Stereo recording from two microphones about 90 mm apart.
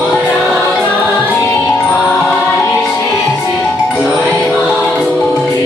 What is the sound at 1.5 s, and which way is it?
Music, 25° left (ahead or behind).